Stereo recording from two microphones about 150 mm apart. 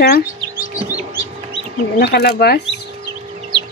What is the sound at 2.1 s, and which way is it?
Speech, 90° left.